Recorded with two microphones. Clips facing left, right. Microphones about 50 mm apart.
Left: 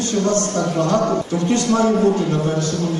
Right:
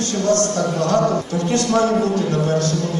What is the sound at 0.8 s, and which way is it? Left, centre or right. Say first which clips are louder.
A man's voice: right 1 dB; left.